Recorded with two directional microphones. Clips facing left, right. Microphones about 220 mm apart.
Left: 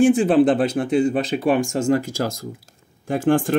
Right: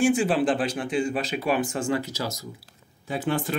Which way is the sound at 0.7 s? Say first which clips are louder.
Left 7 dB; 45° left (ahead or behind).